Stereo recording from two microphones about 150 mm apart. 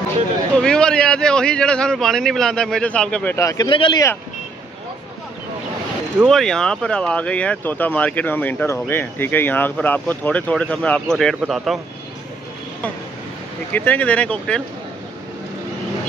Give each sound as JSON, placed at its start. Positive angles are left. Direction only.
{"t": 0.6, "sound": "a man's voice", "side_deg": 5}
{"t": 3.3, "sound": "speech", "side_deg": 20}
{"t": 3.6, "sound": "speech", "side_deg": 35}
{"t": 6.2, "sound": "speech", "side_deg": 5}
{"t": 13.7, "sound": "speech", "side_deg": 10}